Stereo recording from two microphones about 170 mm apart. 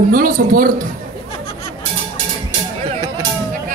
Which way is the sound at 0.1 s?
55° right (ahead or behind).